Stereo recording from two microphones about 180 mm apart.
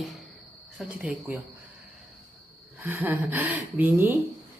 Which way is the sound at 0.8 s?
5° right (ahead or behind).